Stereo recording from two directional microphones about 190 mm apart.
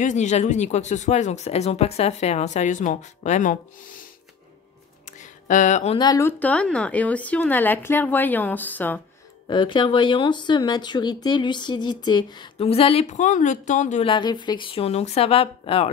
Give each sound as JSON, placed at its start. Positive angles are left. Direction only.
{"t": 0.0, "sound": "speech", "side_deg": 40}
{"t": 5.5, "sound": "speech", "side_deg": 40}
{"t": 5.9, "sound": "speech", "side_deg": 20}
{"t": 9.5, "sound": "speech", "side_deg": 25}
{"t": 14.0, "sound": "speech", "side_deg": 25}